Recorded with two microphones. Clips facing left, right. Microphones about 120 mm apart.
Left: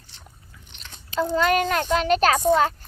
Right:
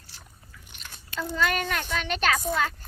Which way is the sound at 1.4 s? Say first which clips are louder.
Left 4 dB; 40° left (ahead or behind).